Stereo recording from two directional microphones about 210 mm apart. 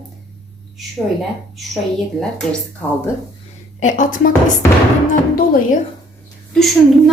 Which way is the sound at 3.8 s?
40° left (ahead or behind).